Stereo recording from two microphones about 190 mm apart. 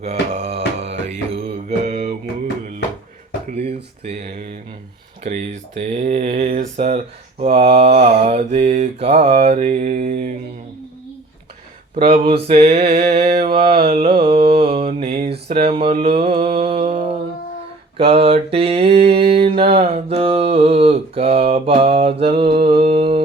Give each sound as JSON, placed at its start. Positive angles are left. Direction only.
{"t": 0.0, "sound": "music", "side_deg": -35}
{"t": 3.4, "sound": "a sound", "side_deg": -35}
{"t": 5.2, "sound": "speech", "side_deg": -35}
{"t": 11.9, "sound": "speech", "side_deg": -25}
{"t": 13.5, "sound": "mantra", "side_deg": -30}
{"t": 14.8, "sound": "speech", "side_deg": -30}
{"t": 16.4, "sound": "mantra", "side_deg": -30}
{"t": 17.9, "sound": "speech", "side_deg": -30}
{"t": 22.5, "sound": "mantra", "side_deg": -30}